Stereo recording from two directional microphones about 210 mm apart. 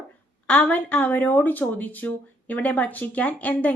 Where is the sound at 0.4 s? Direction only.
5° left (ahead or behind).